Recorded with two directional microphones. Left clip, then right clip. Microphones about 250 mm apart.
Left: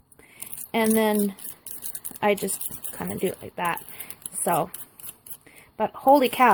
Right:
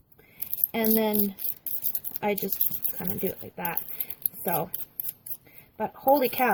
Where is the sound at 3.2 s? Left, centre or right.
Centre.